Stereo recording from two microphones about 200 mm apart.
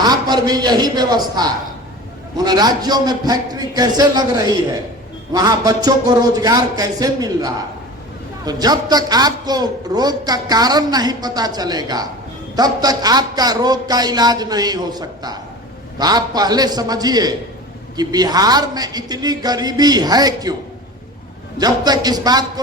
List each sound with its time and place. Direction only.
0.0 s a man's voice: 20° right (ahead or behind)
21.6 s a man's voice: 20° right (ahead or behind)